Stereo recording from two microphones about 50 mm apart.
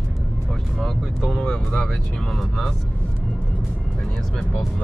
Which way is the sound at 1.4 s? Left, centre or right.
Centre.